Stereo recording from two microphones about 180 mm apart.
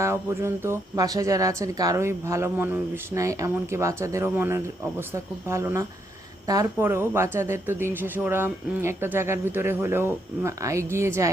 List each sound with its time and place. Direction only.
0.0 s speech: 15° right (ahead or behind)